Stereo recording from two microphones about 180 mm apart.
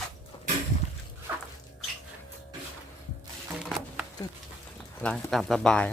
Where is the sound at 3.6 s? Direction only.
5° right (ahead or behind).